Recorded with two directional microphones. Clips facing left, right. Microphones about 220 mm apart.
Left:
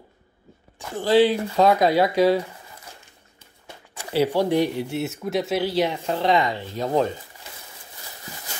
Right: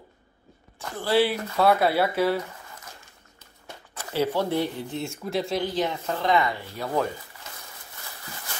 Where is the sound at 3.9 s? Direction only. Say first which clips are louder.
Left 4 dB; 15° left (ahead or behind).